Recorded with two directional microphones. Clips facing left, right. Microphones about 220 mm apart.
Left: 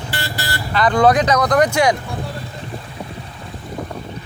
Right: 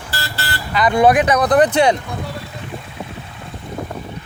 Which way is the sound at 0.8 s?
15° right (ahead or behind).